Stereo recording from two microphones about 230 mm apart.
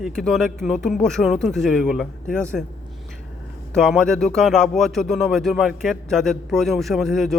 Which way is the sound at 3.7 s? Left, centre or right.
Centre.